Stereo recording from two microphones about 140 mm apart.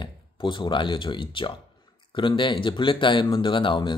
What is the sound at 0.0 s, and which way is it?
Speech, 35° left (ahead or behind).